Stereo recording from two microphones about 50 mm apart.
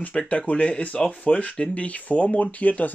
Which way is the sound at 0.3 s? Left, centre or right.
Left.